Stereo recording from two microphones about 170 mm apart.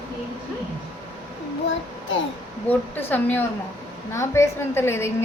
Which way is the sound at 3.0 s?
10° left (ahead or behind).